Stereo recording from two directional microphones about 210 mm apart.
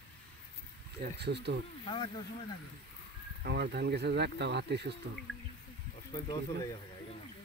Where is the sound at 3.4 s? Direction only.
50° right (ahead or behind).